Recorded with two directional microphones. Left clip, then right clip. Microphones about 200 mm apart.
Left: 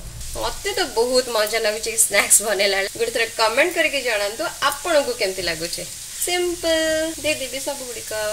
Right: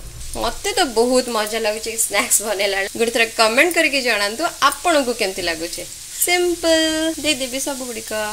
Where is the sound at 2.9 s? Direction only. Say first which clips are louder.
Right 4 dB; 40° right (ahead or behind).